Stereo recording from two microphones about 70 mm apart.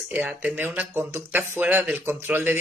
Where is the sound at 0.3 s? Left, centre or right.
Centre.